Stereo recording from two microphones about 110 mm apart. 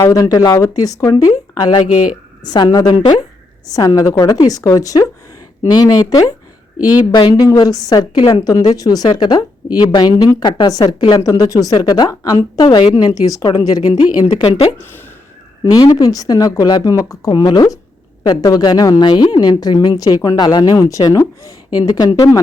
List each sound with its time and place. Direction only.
0.0 s speech: 30° left (ahead or behind)
2.4 s speech: 40° left (ahead or behind)
14.0 s a woman's voice: 65° left (ahead or behind)
14.8 s speech: 20° left (ahead or behind)
15.6 s speech: 35° left (ahead or behind)